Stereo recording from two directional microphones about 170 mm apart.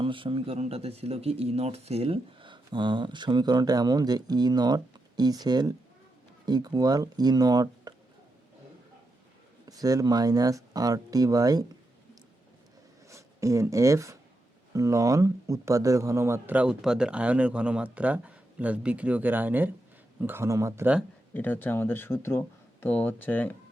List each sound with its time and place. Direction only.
0.0 s speech: 30° right (ahead or behind)
9.6 s speech: 20° right (ahead or behind)
13.1 s speech: 20° right (ahead or behind)
21.3 s speech: 10° left (ahead or behind)